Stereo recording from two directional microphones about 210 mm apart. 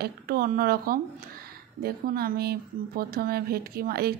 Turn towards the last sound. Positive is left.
turn(degrees=-50)  # may be behind; listen again after turning